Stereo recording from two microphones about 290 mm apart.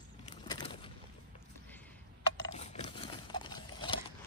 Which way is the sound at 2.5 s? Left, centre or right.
Left.